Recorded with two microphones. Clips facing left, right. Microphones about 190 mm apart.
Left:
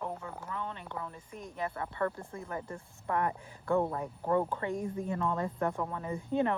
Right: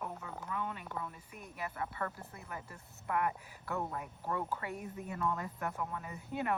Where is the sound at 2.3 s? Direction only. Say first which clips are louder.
Left 8 dB; 30° left (ahead or behind).